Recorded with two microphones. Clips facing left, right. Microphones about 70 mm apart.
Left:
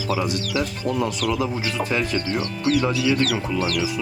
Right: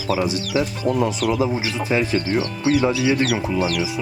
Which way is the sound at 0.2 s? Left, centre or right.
Right.